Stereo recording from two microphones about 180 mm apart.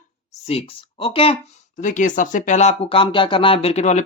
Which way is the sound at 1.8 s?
45° left (ahead or behind).